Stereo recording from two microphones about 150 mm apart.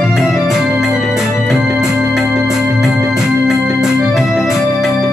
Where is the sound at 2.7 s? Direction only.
Centre (ahead or behind).